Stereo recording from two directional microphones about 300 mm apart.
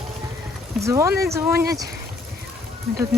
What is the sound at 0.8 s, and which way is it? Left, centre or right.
Speech, centre.